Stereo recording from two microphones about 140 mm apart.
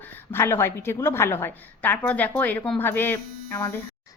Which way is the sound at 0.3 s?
15° left (ahead or behind).